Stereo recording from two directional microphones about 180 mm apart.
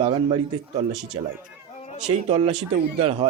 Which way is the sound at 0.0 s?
30° right (ahead or behind).